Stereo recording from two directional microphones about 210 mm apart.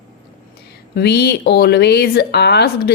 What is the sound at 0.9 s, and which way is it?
Speech, 50° left (ahead or behind).